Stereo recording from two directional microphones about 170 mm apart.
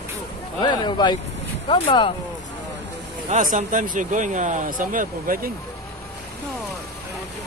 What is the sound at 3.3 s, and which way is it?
Speech, 50° right (ahead or behind).